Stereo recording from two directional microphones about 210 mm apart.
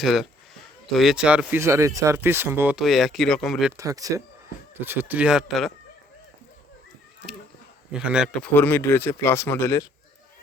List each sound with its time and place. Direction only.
0.0 s speech: centre (ahead or behind)
3.8 s speech: 15° right (ahead or behind)
7.9 s speech: 5° right (ahead or behind); by 9.8 s 10° left (ahead or behind)